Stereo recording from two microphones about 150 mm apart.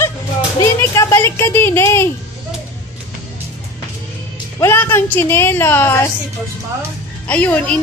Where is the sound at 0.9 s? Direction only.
20° left (ahead or behind).